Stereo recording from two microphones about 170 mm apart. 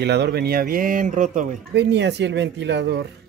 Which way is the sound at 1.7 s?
85° right.